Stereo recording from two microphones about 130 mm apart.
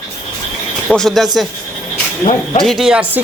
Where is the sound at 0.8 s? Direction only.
5° left (ahead or behind).